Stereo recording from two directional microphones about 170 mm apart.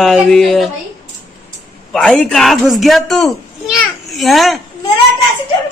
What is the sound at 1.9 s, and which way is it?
Speech, centre (ahead or behind).